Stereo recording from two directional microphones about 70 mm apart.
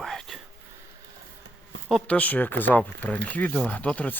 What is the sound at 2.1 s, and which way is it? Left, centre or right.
Speech, left.